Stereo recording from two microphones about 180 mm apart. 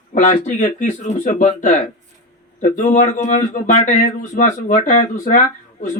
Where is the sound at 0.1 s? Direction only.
40° left (ahead or behind).